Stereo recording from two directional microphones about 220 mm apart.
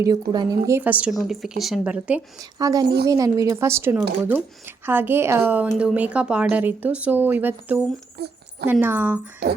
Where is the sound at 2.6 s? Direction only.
15° right (ahead or behind).